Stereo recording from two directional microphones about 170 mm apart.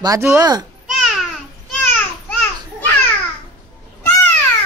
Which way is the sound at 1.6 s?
10° left (ahead or behind).